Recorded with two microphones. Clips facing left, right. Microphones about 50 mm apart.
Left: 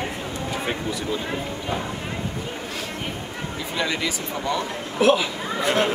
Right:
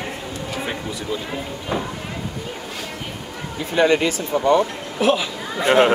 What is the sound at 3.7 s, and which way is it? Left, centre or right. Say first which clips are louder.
Speech: right 9 dB; right.